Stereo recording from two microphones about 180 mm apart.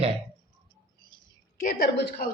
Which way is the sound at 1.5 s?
45° left (ahead or behind).